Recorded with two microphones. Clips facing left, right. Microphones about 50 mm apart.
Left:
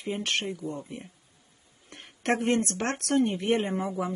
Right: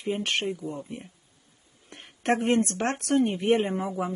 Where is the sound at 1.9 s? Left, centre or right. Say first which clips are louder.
Right 2 dB; centre.